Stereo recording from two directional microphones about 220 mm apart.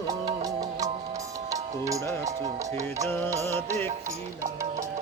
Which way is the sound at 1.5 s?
15° right (ahead or behind).